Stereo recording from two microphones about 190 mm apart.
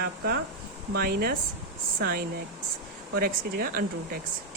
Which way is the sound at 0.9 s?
55° right (ahead or behind).